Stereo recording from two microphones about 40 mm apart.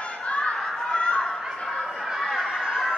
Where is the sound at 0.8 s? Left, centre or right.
Left.